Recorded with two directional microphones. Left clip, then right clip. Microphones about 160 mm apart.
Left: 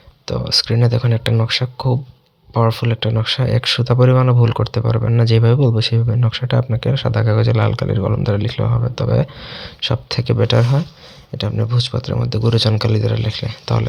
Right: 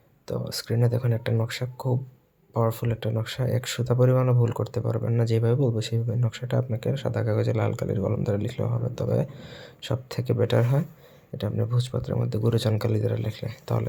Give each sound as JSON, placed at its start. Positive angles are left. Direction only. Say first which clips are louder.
{"t": 0.3, "sound": "speech", "louder": "left 13 dB", "side_deg": 15}